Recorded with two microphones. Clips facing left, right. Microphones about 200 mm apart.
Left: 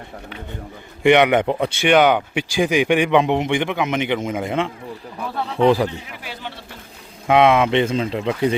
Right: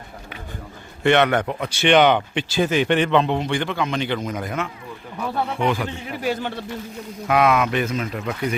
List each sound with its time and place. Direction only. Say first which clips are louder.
1.0 s speech: left 3 dB; 15° left (ahead or behind)
1.5 s speech: left 6 dB; 30° left (ahead or behind)
1.8 s a man's voice: even; 5° left (ahead or behind); by 5.9 s 35° left (ahead or behind)
6.1 s a man's voice: right 9 dB; 45° right (ahead or behind)
7.3 s speech: left 4 dB; 25° left (ahead or behind)